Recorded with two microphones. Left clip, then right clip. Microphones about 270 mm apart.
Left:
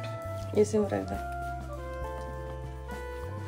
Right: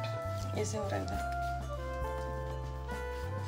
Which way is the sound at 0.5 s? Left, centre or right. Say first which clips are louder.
Left 13 dB; left.